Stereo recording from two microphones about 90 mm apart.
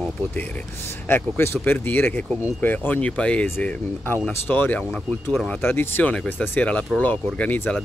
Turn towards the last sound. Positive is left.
turn(degrees=15)  # may be behind; listen again after turning